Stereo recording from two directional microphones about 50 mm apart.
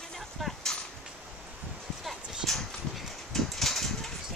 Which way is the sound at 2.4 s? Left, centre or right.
Centre.